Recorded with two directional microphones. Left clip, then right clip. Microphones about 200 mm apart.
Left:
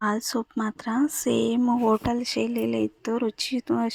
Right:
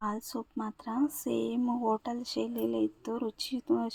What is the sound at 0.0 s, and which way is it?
Speech, 20° left (ahead or behind).